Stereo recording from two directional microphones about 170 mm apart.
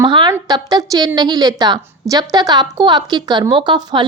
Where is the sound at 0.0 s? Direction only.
25° right (ahead or behind).